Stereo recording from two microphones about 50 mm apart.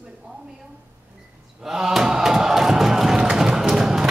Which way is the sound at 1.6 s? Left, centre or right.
Centre.